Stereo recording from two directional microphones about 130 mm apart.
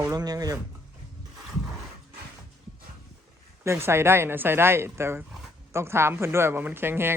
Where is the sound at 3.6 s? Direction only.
20° right (ahead or behind).